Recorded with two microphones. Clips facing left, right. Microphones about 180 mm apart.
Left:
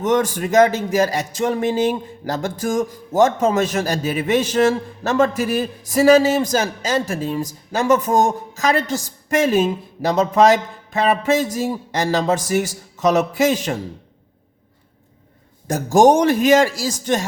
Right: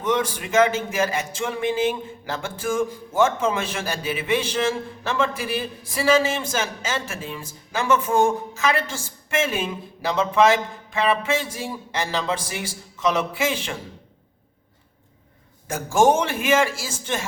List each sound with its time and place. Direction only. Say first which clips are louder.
0.0 s speech: left 5 dB; 45° left (ahead or behind)
15.6 s speech: left 5 dB; 35° left (ahead or behind)